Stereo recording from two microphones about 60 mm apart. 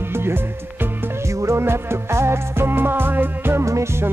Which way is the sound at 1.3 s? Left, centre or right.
Right.